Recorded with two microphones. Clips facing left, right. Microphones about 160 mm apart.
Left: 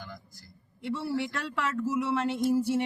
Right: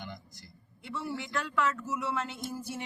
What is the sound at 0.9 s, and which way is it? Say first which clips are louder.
Speech: left 6 dB; 30° left (ahead or behind).